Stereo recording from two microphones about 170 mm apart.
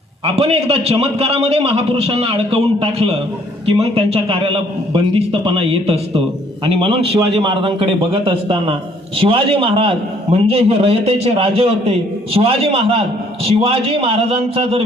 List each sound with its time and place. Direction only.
0.3 s a man's voice: 35° right (ahead or behind)